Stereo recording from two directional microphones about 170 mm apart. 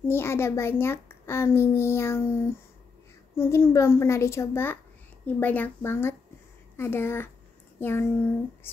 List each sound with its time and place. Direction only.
0.1 s a child's voice: 15° left (ahead or behind)